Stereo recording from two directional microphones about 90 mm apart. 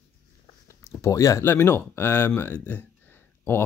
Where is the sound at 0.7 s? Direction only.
30° left (ahead or behind).